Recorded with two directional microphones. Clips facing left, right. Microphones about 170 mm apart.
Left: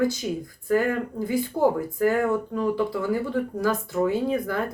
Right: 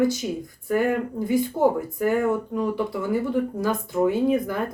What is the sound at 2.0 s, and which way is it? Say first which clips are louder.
Speech: even; 20° right (ahead or behind).